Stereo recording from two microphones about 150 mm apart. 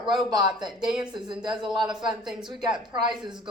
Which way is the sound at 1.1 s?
30° right (ahead or behind).